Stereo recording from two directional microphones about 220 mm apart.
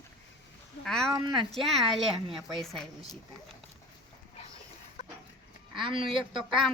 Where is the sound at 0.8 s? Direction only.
Centre (ahead or behind).